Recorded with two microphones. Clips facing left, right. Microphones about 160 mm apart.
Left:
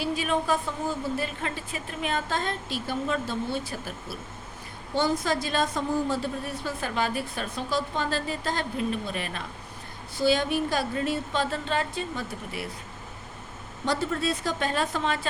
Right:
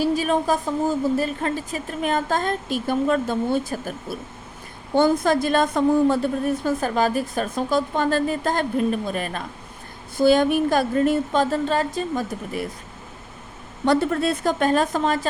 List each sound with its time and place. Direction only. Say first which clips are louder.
0.0 s a woman's voice: right 6 dB; 40° right (ahead or behind)
13.8 s a woman's voice: right 7 dB; 60° right (ahead or behind); by 15.3 s 40° right (ahead or behind)